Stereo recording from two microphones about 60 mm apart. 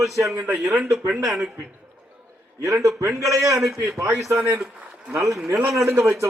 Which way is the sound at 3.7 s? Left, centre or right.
Right.